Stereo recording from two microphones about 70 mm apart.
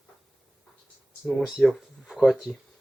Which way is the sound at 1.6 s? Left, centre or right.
Centre.